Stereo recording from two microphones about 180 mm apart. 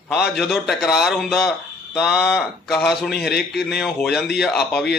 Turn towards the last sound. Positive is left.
turn(degrees=0)  # may be behind; listen again after turning